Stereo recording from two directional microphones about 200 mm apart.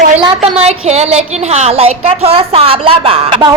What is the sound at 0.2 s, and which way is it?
A woman's voice, 30° right (ahead or behind).